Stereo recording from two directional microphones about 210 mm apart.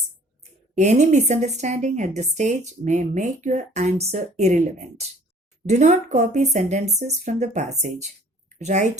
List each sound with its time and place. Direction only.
0.8 s a woman's voice: 35° right (ahead or behind)